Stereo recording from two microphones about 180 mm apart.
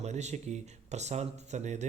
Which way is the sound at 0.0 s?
40° right (ahead or behind).